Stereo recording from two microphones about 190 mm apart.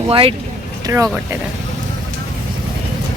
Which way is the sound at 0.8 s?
15° right (ahead or behind).